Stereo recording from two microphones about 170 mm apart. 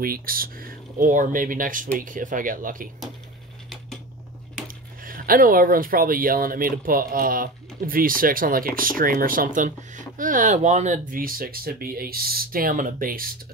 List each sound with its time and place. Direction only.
0.0 s speech: 60° right (ahead or behind)
4.6 s speech: 55° right (ahead or behind)